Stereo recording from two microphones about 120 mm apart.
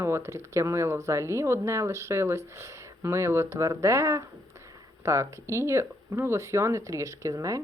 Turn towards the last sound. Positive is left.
turn(degrees=-30)  # may be behind; listen again after turning